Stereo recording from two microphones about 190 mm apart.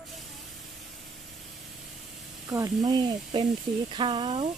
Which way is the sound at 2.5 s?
20° right (ahead or behind).